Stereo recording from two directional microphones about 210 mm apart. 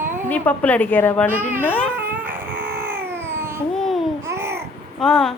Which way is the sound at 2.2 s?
10° right (ahead or behind).